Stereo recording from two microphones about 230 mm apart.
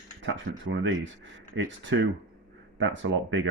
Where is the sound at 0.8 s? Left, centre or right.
Right.